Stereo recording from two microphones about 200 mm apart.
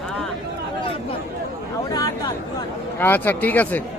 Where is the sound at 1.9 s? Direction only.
20° left (ahead or behind).